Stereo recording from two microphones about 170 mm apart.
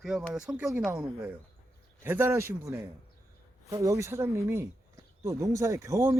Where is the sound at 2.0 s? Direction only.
15° right (ahead or behind).